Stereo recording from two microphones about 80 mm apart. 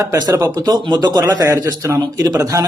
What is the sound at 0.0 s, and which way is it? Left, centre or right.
Speech, right.